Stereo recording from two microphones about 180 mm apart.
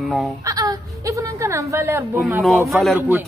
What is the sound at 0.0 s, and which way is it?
Speech, centre (ahead or behind).